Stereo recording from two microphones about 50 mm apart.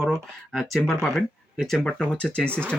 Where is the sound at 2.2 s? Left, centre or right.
Left.